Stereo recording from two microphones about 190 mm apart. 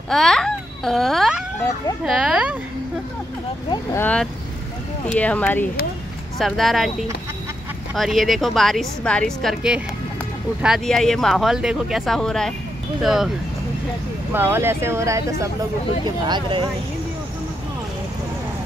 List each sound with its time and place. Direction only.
0.1 s a child's voice: centre (ahead or behind)
3.7 s a woman's voice: 10° left (ahead or behind)
14.3 s speech: 10° right (ahead or behind)